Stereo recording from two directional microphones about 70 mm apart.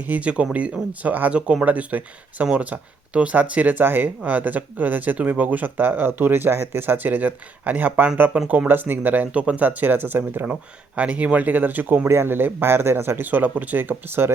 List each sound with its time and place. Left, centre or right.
0.1 s speech: centre
12.0 s speech: right